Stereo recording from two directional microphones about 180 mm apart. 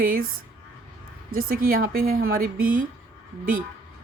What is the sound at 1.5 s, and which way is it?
Speech, 55° right (ahead or behind).